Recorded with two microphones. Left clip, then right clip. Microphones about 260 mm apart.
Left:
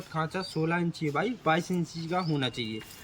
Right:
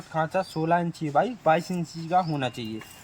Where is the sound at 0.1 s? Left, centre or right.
Centre.